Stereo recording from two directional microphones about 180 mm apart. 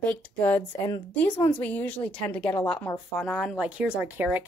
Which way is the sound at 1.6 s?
10° left (ahead or behind).